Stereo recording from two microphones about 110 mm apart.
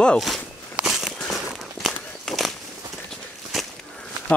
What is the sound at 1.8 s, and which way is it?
Walk, 5° left (ahead or behind).